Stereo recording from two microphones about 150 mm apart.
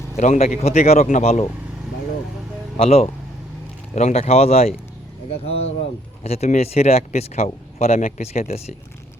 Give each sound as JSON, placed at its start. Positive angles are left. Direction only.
{"t": 0.2, "sound": "speech", "side_deg": 50}
{"t": 2.7, "sound": "speech", "side_deg": 40}